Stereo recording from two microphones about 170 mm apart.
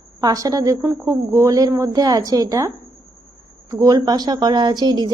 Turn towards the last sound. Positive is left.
turn(degrees=-25)  # may be behind; listen again after turning